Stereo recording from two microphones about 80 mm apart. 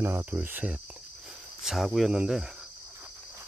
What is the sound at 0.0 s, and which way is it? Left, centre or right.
Speech, right.